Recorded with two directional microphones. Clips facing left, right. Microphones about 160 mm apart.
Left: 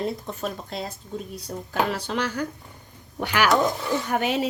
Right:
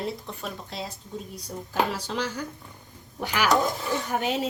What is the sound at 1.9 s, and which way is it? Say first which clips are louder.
Speech: left 3 dB; 65° left (ahead or behind).